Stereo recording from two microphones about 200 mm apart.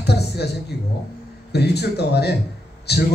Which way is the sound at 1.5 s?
55° left (ahead or behind).